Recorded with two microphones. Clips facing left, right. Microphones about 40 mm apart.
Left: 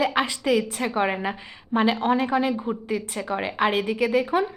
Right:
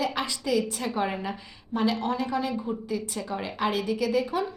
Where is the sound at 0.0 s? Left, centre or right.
Left.